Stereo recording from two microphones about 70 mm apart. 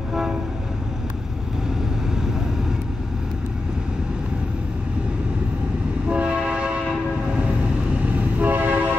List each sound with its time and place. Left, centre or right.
0.1 s train: centre
6.0 s train: centre
8.4 s train: right